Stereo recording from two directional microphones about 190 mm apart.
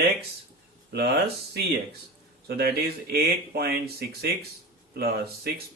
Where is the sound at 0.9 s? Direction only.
55° right (ahead or behind).